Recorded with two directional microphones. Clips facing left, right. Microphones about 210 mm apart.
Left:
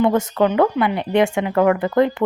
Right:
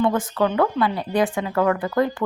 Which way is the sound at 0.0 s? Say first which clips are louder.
Left 4 dB; 25° left (ahead or behind).